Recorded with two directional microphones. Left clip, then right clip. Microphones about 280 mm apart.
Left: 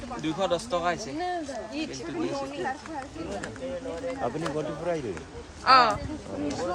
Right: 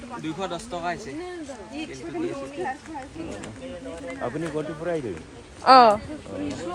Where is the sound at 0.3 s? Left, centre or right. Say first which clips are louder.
Left 7 dB; centre.